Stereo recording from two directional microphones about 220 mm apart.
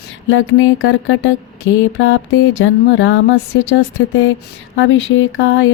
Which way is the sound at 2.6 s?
60° left (ahead or behind).